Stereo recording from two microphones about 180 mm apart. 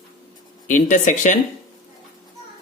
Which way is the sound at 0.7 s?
45° left (ahead or behind).